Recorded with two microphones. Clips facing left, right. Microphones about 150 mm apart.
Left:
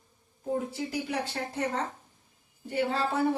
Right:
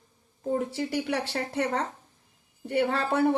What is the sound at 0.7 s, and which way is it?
A woman's voice, 75° right (ahead or behind).